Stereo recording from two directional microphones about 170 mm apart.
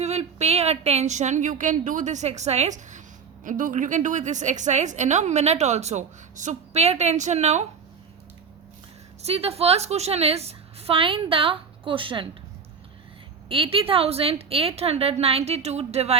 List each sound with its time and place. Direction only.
0.0 s a woman's voice: 40° right (ahead or behind)
9.2 s a woman's voice: 35° right (ahead or behind)
13.5 s a woman's voice: 30° right (ahead or behind)